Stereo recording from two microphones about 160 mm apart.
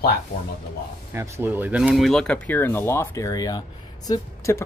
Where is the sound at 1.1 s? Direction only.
15° right (ahead or behind).